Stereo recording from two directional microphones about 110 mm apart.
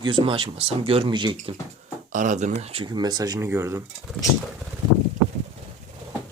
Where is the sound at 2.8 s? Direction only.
40° right (ahead or behind).